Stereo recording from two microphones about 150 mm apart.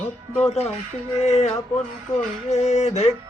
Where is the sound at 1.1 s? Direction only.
50° left (ahead or behind).